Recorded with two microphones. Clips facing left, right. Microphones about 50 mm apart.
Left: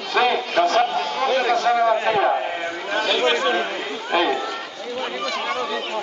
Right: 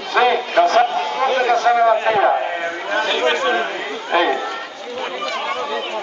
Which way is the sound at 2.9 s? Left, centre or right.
Right.